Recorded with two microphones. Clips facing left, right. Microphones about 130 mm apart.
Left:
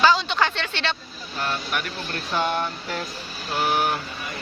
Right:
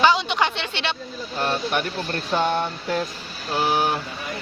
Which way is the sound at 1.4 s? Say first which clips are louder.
Right 4 dB; 30° right (ahead or behind).